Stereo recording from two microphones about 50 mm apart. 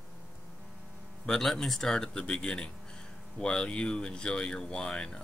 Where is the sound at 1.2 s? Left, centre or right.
Centre.